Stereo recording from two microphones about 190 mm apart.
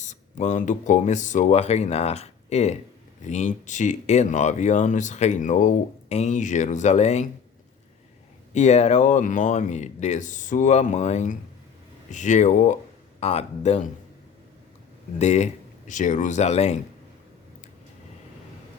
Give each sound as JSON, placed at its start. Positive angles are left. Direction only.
{"t": 0.0, "sound": "speech", "side_deg": 40}
{"t": 8.5, "sound": "speech", "side_deg": 35}
{"t": 15.2, "sound": "speech", "side_deg": 35}